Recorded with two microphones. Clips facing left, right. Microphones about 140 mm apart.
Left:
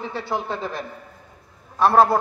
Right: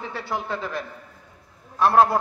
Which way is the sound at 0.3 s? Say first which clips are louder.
Left 1 dB; 30° left (ahead or behind).